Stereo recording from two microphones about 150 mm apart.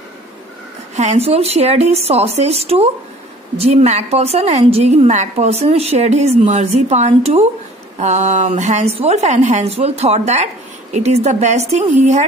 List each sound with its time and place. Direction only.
0.9 s a woman's voice: 45° right (ahead or behind)